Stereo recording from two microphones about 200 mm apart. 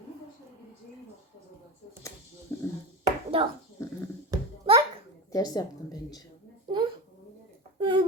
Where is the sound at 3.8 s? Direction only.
15° left (ahead or behind).